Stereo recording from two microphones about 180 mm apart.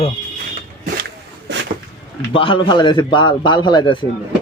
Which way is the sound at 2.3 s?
30° left (ahead or behind).